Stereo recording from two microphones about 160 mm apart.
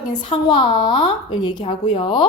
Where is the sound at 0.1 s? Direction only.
30° left (ahead or behind).